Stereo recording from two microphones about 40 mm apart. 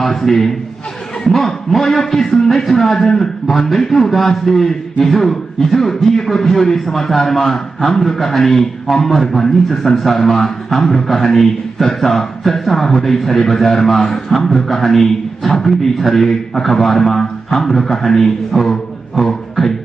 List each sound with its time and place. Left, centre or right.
0.0 s a man's voice: centre